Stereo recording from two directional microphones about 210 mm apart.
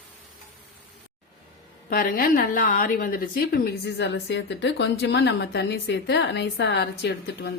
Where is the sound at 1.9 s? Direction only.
40° left (ahead or behind).